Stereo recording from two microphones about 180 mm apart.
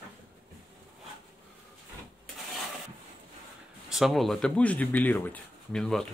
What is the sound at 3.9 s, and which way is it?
Speech, centre (ahead or behind).